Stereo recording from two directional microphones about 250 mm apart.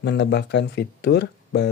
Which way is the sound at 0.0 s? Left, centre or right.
Left.